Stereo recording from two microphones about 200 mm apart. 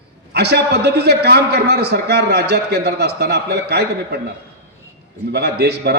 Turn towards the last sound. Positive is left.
turn(degrees=-55)  # may be behind; listen again after turning